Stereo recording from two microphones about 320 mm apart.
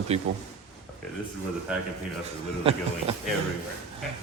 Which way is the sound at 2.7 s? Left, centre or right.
Centre.